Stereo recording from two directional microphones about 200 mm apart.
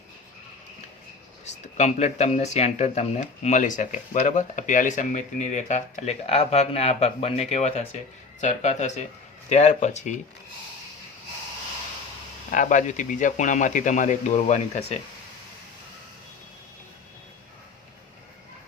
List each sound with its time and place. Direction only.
1.7 s speech: 35° left (ahead or behind)
12.5 s speech: 40° left (ahead or behind)